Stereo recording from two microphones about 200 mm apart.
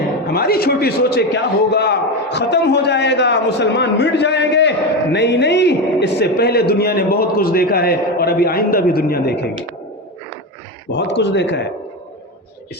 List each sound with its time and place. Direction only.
0.3 s a man's voice: 50° left (ahead or behind)
10.9 s a man's voice: 60° left (ahead or behind)